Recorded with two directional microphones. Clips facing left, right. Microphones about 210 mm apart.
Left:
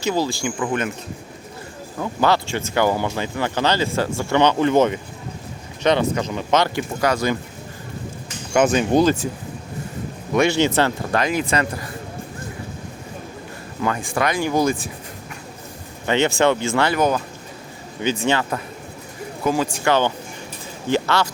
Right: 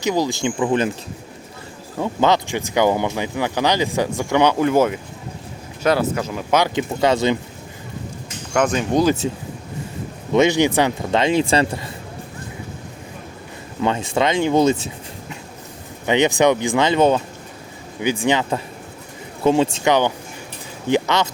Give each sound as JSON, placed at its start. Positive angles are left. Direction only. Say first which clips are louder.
{"t": 0.0, "sound": "speech", "louder": "right 2 dB", "side_deg": -15}
{"t": 2.0, "sound": "speech", "louder": "right 2 dB", "side_deg": -20}
{"t": 7.0, "sound": "speech", "louder": "right 3 dB", "side_deg": -25}
{"t": 8.5, "sound": "speech", "louder": "left 2 dB", "side_deg": 5}
{"t": 10.3, "sound": "speech", "louder": "right 2 dB", "side_deg": -20}
{"t": 13.8, "sound": "speech", "louder": "right 3 dB", "side_deg": -25}
{"t": 16.0, "sound": "speech", "louder": "right 2 dB", "side_deg": -15}
{"t": 18.0, "sound": "speech", "louder": "right 2 dB", "side_deg": -15}
{"t": 19.7, "sound": "speech", "louder": "right 2 dB", "side_deg": -15}